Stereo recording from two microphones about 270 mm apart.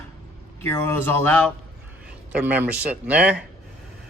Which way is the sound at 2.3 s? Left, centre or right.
Centre.